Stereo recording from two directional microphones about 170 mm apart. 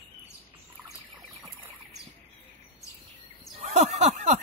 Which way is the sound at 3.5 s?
40° right (ahead or behind).